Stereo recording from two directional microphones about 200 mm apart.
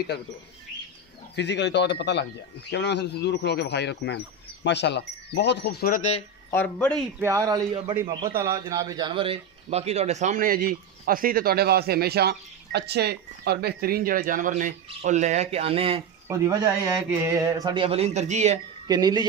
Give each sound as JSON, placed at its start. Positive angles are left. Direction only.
{"t": 1.3, "sound": "speech", "side_deg": 60}
{"t": 6.5, "sound": "speech", "side_deg": 10}
{"t": 7.2, "sound": "a man's voice", "side_deg": -15}
{"t": 16.3, "sound": "a man's voice", "side_deg": -15}
{"t": 18.9, "sound": "speech", "side_deg": -20}